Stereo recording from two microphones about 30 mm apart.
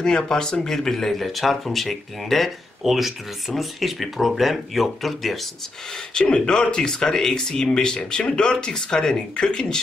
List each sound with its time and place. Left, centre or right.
0.0 s speech: left; by 5.5 s centre
6.2 s speech: left
9.3 s speech: left